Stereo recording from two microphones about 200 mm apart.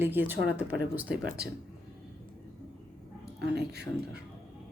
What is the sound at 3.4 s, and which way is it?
Speech, 55° right (ahead or behind).